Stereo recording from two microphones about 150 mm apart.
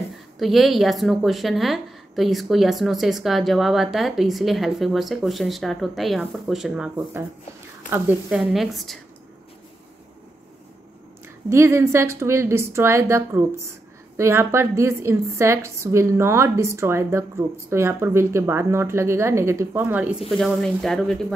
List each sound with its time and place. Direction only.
0.4 s a woman's voice: centre (ahead or behind)
7.9 s a woman's voice: 5° right (ahead or behind)
11.4 s a woman's voice: 20° right (ahead or behind); by 21.2 s 5° left (ahead or behind)